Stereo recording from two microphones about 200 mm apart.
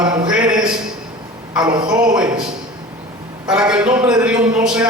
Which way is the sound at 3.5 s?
5° right (ahead or behind).